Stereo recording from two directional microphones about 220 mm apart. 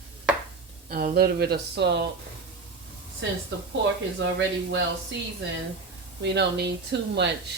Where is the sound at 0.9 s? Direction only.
45° right (ahead or behind).